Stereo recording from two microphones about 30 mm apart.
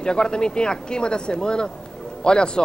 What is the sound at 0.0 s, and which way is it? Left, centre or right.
A man's voice, left.